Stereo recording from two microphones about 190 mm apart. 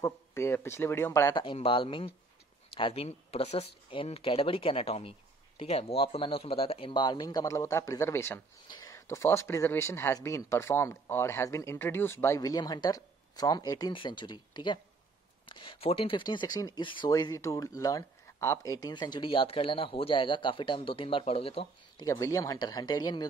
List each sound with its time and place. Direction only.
0.0 s speech: 15° left (ahead or behind)
1.4 s speech: 25° left (ahead or behind)
22.0 s speech: 15° left (ahead or behind)